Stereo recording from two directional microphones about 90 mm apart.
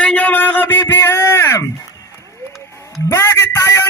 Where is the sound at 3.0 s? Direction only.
30° left (ahead or behind).